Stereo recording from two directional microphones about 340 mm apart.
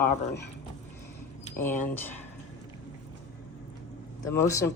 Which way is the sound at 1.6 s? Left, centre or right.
Centre.